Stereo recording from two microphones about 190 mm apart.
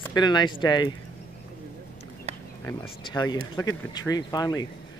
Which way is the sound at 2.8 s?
25° left (ahead or behind).